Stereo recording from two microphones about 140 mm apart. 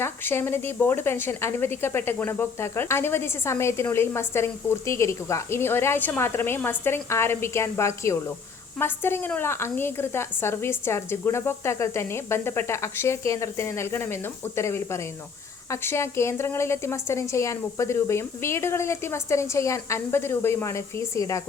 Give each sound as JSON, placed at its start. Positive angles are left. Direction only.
{"t": 0.0, "sound": "a woman's voice", "side_deg": 15}